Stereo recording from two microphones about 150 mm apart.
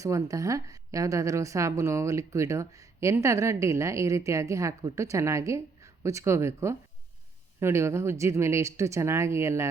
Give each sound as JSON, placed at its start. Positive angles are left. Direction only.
{"t": 0.0, "sound": "a woman's voice", "side_deg": -20}